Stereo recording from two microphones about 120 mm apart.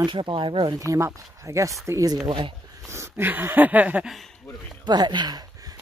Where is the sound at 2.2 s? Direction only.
45° right (ahead or behind).